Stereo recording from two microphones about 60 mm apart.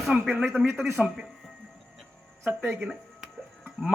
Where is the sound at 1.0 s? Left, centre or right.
Centre.